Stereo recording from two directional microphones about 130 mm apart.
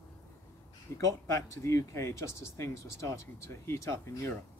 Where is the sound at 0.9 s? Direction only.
20° left (ahead or behind).